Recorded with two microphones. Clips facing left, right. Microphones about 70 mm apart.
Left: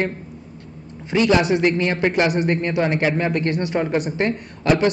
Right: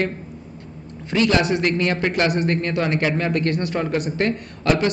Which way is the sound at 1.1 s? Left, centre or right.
Centre.